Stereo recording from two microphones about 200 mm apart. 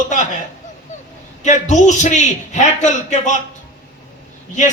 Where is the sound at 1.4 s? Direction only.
35° left (ahead or behind).